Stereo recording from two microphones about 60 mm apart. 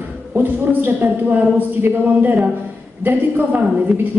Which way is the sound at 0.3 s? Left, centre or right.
Right.